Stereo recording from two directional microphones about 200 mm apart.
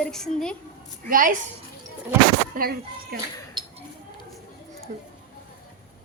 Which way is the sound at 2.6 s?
50° right (ahead or behind).